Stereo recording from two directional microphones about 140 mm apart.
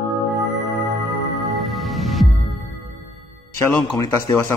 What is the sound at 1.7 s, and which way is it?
Music, centre (ahead or behind).